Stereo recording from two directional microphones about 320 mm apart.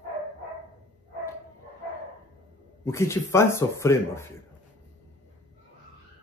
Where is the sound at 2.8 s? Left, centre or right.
Centre.